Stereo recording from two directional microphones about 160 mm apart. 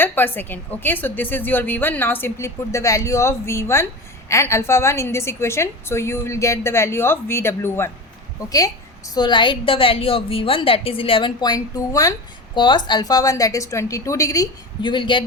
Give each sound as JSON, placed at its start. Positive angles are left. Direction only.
{"t": 0.0, "sound": "a woman's voice", "side_deg": 10}